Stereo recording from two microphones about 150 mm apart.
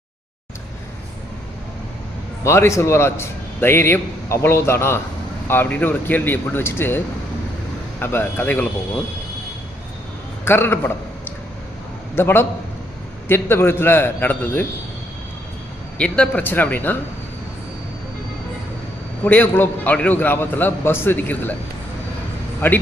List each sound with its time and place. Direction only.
2.4 s a man's voice: 20° left (ahead or behind)
10.4 s a man's voice: 15° left (ahead or behind)
16.0 s a man's voice: 5° left (ahead or behind)
19.2 s a man's voice: 10° left (ahead or behind)
22.6 s a man's voice: 15° left (ahead or behind)